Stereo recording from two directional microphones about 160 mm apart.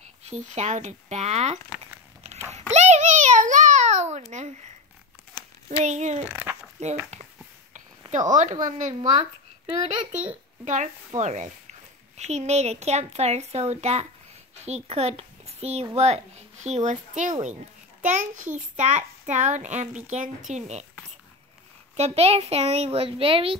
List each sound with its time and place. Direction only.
0.2 s a woman's voice: 45° right (ahead or behind)
2.7 s a sound: 45° right (ahead or behind)
5.7 s a woman's voice: 45° right (ahead or behind)
8.3 s a woman's voice: 50° right (ahead or behind)
10.6 s a woman's voice: 50° right (ahead or behind)
21.9 s a child's voice: 40° right (ahead or behind)